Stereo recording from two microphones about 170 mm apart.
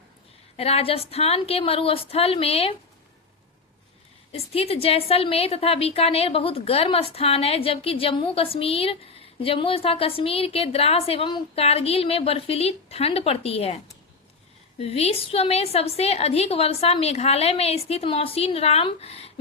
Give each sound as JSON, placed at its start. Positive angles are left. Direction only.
{"t": 0.5, "sound": "a woman's voice", "side_deg": 35}
{"t": 4.3, "sound": "a woman's voice", "side_deg": 35}